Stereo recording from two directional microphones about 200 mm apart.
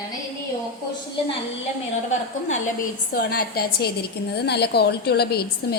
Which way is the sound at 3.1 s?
50° left (ahead or behind).